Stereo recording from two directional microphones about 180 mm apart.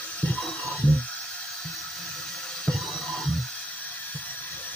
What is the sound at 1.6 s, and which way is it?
Music, centre (ahead or behind).